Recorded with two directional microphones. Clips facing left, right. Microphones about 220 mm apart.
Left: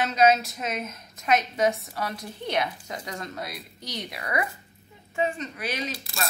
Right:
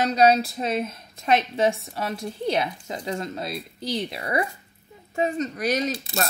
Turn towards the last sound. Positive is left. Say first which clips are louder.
# right 7 dB
turn(degrees=-45)  # may be behind; listen again after turning